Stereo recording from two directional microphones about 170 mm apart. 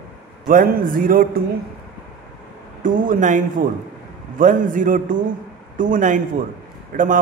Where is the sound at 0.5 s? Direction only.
55° right (ahead or behind).